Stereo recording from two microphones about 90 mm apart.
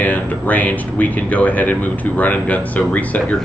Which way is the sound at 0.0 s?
20° left (ahead or behind).